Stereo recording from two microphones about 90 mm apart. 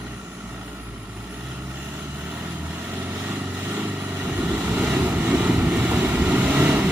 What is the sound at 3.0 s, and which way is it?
Vehicle, 20° right (ahead or behind).